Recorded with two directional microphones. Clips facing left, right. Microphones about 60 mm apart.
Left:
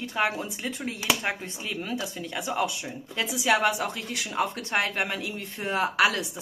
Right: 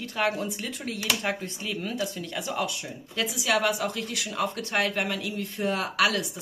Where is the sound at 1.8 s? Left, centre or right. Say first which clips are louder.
Right 1 dB; centre.